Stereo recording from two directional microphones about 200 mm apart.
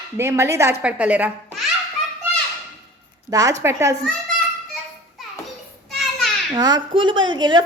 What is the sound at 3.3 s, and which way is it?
Speech, 15° right (ahead or behind).